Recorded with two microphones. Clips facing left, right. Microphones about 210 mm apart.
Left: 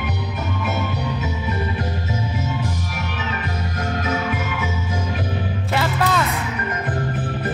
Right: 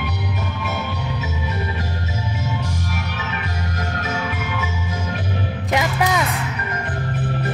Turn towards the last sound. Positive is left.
turn(degrees=-15)  # may be behind; listen again after turning